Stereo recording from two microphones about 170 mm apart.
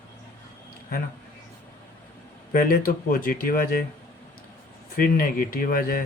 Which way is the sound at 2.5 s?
55° left (ahead or behind).